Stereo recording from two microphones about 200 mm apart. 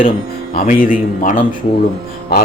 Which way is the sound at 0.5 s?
45° left (ahead or behind).